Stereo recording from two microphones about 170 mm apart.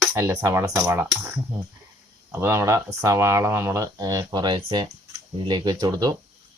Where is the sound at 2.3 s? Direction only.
15° right (ahead or behind).